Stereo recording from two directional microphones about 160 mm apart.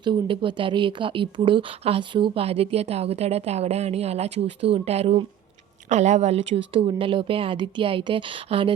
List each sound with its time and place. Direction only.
0.0 s speech: 30° right (ahead or behind)